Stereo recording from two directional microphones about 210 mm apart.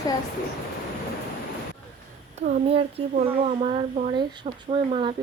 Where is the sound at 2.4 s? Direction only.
35° right (ahead or behind).